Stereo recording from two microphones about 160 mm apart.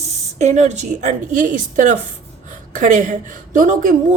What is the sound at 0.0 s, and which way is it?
A woman's voice, 45° right (ahead or behind).